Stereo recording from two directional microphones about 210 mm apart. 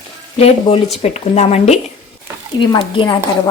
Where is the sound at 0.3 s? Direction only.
30° left (ahead or behind).